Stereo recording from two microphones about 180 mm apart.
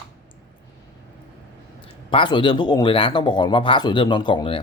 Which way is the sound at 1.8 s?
30° left (ahead or behind).